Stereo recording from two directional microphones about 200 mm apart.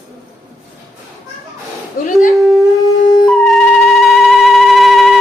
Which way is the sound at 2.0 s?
45° left (ahead or behind).